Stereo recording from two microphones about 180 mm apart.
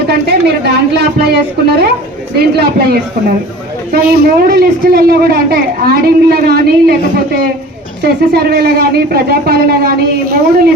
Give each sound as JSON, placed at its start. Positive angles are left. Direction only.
{"t": 0.1, "sound": "speech", "side_deg": -65}
{"t": 8.0, "sound": "speech", "side_deg": -60}